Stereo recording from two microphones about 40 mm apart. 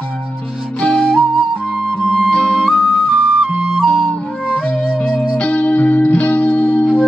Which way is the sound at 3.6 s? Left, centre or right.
Centre.